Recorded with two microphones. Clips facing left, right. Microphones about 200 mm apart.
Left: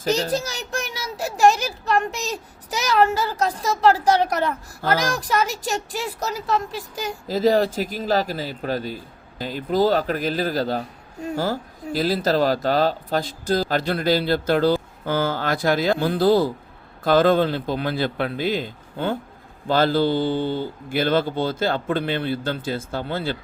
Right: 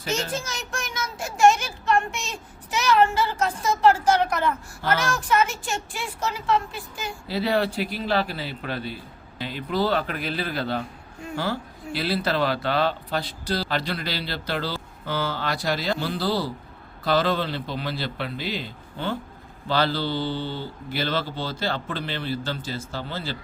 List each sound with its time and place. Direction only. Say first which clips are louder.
0.0 s a child's voice: left 6 dB; 35° left (ahead or behind); by 23.4 s 55° left (ahead or behind)